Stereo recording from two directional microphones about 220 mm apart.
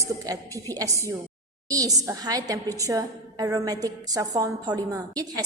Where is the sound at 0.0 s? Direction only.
15° right (ahead or behind).